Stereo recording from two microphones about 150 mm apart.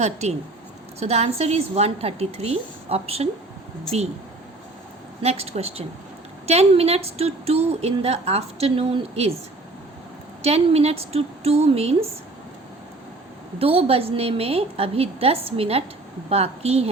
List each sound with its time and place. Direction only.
0.0 s a woman's voice: 45° right (ahead or behind)
5.2 s a woman's voice: 45° right (ahead or behind)
10.4 s a woman's voice: 40° right (ahead or behind)
13.6 s a woman's voice: 40° right (ahead or behind)